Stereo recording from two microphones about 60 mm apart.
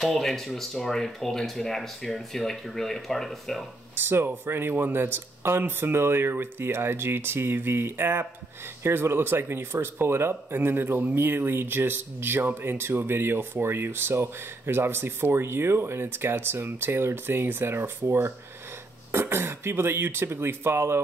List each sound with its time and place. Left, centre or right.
0.0 s speech: centre
3.9 s speech: right